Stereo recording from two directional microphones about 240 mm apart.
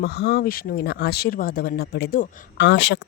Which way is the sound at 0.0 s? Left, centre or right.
Left.